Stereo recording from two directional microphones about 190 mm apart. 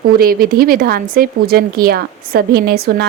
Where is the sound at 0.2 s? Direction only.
50° right (ahead or behind).